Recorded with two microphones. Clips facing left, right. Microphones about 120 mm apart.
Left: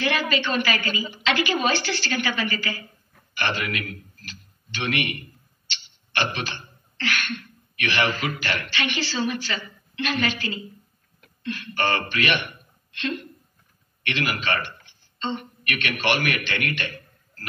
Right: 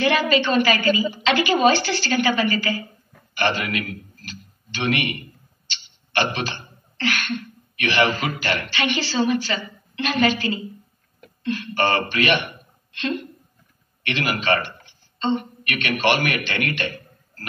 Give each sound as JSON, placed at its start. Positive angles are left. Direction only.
{"t": 0.0, "sound": "a woman's voice", "side_deg": -30}
{"t": 5.7, "sound": "a sound", "side_deg": -30}
{"t": 11.4, "sound": "a woman's voice", "side_deg": -30}